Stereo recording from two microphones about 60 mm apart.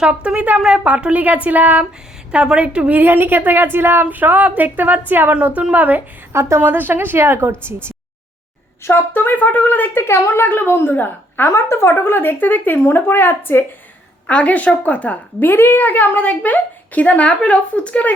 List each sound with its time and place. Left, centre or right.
0.0 s a woman's voice: centre
2.3 s a woman's voice: centre
3.0 s a woman's voice: right
6.3 s a woman's voice: right
6.6 s a woman's voice: right
8.8 s speech: left
9.9 s speech: left
11.5 s speech: left
14.3 s a woman's voice: left
15.4 s a woman's voice: left